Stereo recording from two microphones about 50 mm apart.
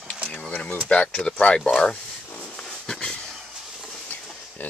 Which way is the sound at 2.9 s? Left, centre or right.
Centre.